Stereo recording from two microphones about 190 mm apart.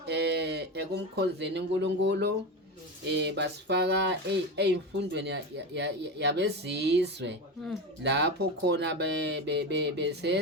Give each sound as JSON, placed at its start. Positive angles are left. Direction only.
{"t": 0.0, "sound": "speech", "side_deg": -60}